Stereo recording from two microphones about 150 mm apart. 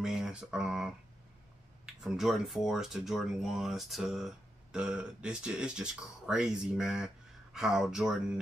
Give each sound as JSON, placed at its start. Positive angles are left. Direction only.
{"t": 0.0, "sound": "speech", "side_deg": -5}
{"t": 2.0, "sound": "speech", "side_deg": 0}